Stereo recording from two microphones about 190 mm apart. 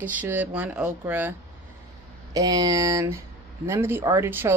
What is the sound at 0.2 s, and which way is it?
A woman's voice, 10° right (ahead or behind).